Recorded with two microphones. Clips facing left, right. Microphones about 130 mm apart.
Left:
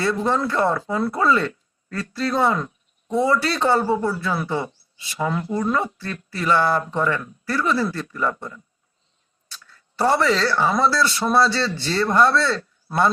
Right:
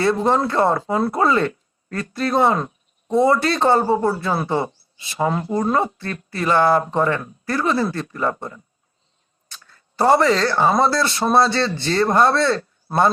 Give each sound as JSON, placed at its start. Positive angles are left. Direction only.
{"t": 0.0, "sound": "speech", "side_deg": -25}
{"t": 3.2, "sound": "a man's voice", "side_deg": -50}
{"t": 3.9, "sound": "a man's voice", "side_deg": -40}
{"t": 9.6, "sound": "a man's voice", "side_deg": -50}